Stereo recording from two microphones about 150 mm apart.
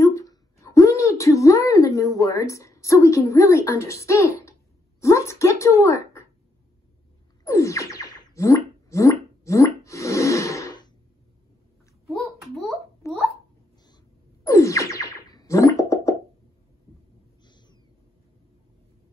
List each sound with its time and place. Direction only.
0.0 s a sound: 20° left (ahead or behind)
2.1 s speech: 20° left (ahead or behind)
7.4 s music: 20° left (ahead or behind)
13.0 s a sound: 20° left (ahead or behind)
14.4 s music: 20° left (ahead or behind)
17.5 s cat: 30° left (ahead or behind)